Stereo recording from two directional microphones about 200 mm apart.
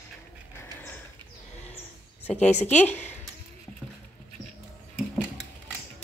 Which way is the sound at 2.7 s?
10° left (ahead or behind).